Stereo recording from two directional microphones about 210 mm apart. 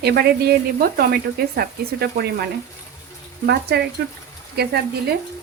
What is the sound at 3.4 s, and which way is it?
Speech, 50° right (ahead or behind).